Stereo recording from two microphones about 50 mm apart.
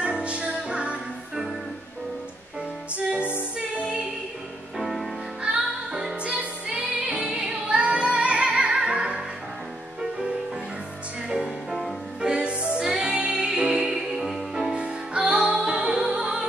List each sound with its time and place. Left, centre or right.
0.0 s music: right
3.1 s music: right
4.7 s music: centre
5.4 s music: centre
6.2 s music: right
11.4 s music: centre
12.2 s music: centre